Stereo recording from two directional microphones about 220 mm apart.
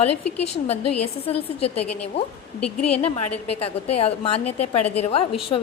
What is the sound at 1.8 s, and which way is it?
Speech, 90° left.